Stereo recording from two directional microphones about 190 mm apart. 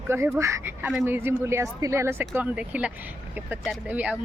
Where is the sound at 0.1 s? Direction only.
15° right (ahead or behind).